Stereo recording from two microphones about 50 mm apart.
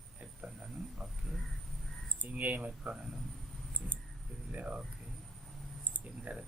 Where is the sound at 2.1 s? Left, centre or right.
Right.